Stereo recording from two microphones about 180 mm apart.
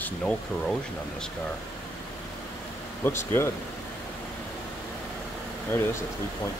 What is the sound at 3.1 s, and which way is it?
Speech, 15° left (ahead or behind).